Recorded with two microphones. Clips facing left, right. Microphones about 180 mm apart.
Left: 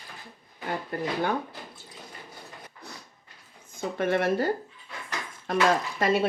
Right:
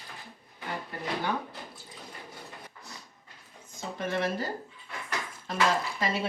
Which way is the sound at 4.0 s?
60° left (ahead or behind).